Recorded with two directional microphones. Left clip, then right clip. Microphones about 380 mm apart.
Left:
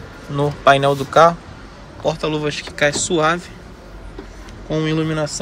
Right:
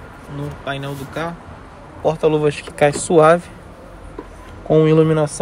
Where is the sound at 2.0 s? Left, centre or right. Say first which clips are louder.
Right 4 dB; centre.